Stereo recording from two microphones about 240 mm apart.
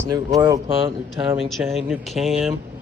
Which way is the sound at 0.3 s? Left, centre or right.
Centre.